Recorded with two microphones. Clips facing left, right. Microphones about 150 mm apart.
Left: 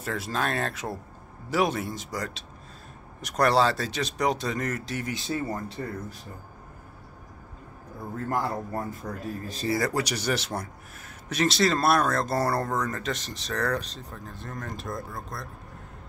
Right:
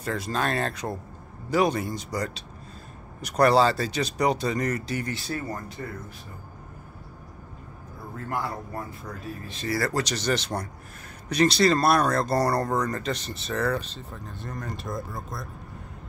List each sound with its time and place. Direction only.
0.0 s speech: centre (ahead or behind)
5.1 s speech: 20° left (ahead or behind)
8.3 s a man's voice: 40° left (ahead or behind)
9.7 s speech: 15° left (ahead or behind); by 15.4 s centre (ahead or behind)